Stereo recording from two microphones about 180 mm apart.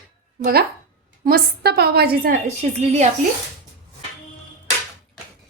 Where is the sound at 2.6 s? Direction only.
40° right (ahead or behind).